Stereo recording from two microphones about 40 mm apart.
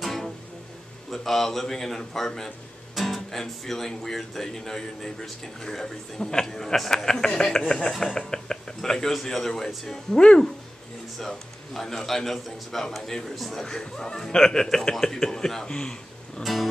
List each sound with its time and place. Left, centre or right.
0.0 s music: centre
1.1 s speech: centre
10.1 s speech: left
11.1 s speech: centre